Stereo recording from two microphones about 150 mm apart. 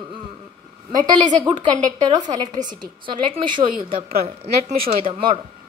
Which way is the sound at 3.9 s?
80° right.